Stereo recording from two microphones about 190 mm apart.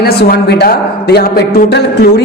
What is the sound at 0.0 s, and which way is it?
A woman's voice, 55° left (ahead or behind).